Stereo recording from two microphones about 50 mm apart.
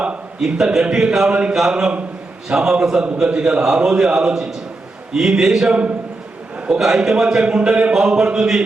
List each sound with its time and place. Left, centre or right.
0.4 s a man's voice: centre
5.6 s a man's voice: right
6.6 s a man's voice: centre